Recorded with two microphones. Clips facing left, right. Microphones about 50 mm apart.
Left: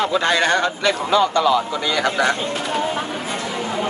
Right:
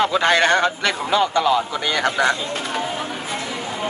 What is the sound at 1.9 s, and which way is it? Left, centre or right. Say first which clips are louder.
Speech: even; right.